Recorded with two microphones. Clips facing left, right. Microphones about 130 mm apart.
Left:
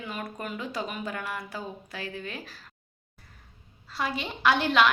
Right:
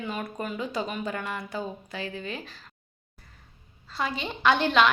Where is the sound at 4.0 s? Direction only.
Centre (ahead or behind).